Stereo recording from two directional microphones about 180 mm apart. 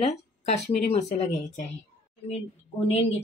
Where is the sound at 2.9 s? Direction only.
35° left (ahead or behind).